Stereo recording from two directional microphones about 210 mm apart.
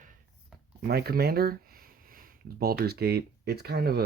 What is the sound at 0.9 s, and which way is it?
Speech, 50° right (ahead or behind).